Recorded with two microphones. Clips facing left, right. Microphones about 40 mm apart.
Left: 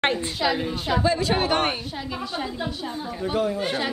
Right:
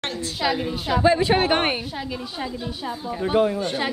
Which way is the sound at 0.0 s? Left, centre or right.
Left.